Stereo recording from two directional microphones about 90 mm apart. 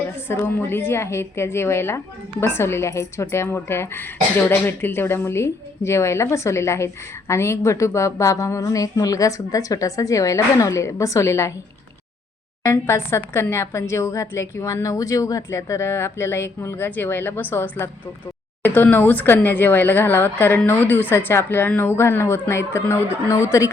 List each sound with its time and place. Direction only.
0.3 s speech: 25° left (ahead or behind)
12.6 s speech: 30° left (ahead or behind)